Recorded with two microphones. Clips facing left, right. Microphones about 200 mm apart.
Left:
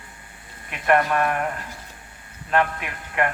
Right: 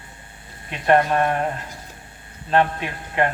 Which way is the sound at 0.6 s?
30° right (ahead or behind).